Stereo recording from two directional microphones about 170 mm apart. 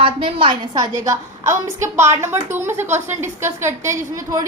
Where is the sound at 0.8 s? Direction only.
20° right (ahead or behind).